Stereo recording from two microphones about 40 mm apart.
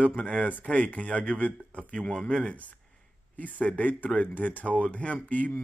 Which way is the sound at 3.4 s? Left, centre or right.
Left.